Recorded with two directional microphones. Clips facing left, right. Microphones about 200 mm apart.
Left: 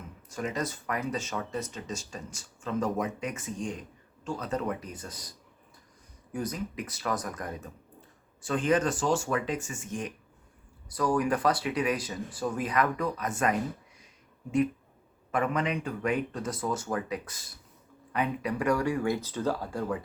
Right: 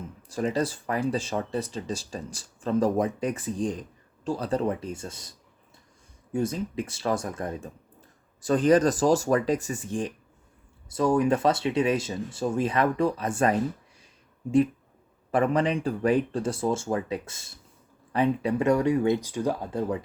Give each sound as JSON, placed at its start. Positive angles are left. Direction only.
{"t": 0.2, "sound": "speech", "side_deg": -30}
{"t": 6.3, "sound": "speech", "side_deg": -25}
{"t": 8.4, "sound": "speech", "side_deg": -40}
{"t": 15.3, "sound": "speech", "side_deg": -30}